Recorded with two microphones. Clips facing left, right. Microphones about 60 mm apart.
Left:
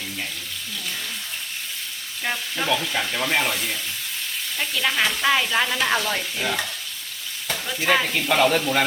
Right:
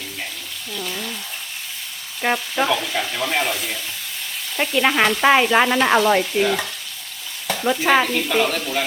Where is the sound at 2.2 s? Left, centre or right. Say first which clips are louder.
Right 7 dB; right.